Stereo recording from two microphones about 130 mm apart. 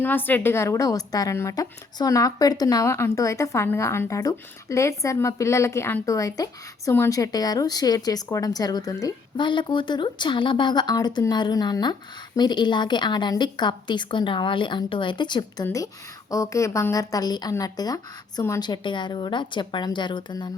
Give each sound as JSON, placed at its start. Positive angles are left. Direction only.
{"t": 0.0, "sound": "a woman's voice", "side_deg": 15}
{"t": 15.6, "sound": "a woman's voice", "side_deg": 25}